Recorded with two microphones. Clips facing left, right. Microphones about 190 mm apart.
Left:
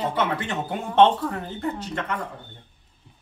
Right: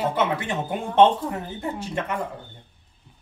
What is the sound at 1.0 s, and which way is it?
Speech, 10° right (ahead or behind).